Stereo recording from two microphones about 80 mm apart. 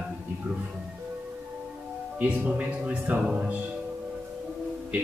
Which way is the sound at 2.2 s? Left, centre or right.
Right.